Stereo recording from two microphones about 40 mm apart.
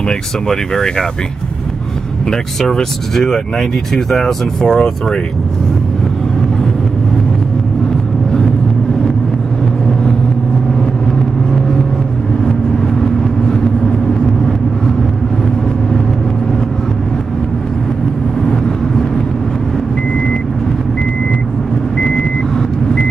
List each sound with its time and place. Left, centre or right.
0.5 s speech: centre
2.6 s speech: centre
4.7 s speech: left
13.0 s vehicle: centre
21.9 s vehicle: centre